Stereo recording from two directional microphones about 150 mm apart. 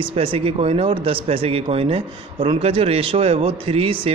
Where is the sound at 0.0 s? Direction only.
40° right (ahead or behind).